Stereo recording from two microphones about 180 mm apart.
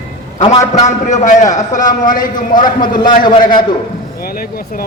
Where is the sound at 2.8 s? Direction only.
25° left (ahead or behind).